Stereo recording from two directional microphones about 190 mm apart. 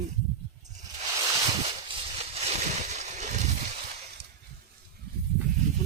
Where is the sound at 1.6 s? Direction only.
35° right (ahead or behind).